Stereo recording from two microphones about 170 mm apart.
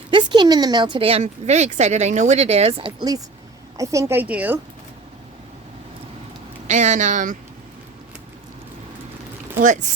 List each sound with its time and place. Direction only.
0.1 s a woman's voice: 25° right (ahead or behind); by 4.6 s 10° right (ahead or behind)
6.7 s speech: 45° right (ahead or behind)